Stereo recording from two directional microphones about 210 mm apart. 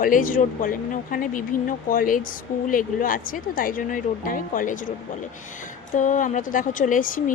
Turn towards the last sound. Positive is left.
turn(degrees=40)  # may be behind; listen again after turning